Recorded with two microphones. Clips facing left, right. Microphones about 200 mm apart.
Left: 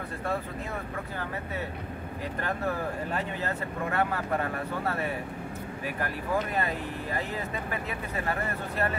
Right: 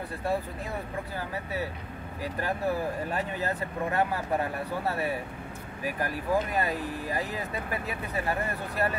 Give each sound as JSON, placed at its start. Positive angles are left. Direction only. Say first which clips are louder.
{"t": 2.4, "sound": "speech", "louder": "right 2 dB", "side_deg": -15}